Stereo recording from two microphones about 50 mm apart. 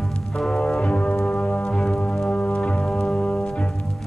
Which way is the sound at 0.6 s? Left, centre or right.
Left.